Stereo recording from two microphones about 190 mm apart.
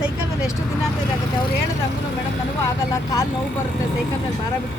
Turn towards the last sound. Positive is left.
turn(degrees=15)  # may be behind; listen again after turning